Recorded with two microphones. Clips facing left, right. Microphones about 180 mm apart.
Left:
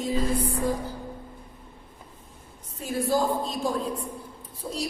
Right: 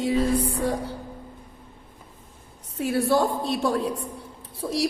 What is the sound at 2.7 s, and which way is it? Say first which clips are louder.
A woman's voice: right 4 dB; 75° right (ahead or behind).